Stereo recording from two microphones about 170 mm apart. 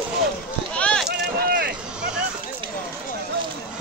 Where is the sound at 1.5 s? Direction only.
75° right (ahead or behind).